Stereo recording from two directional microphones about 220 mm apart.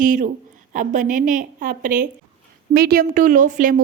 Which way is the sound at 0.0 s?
35° right (ahead or behind).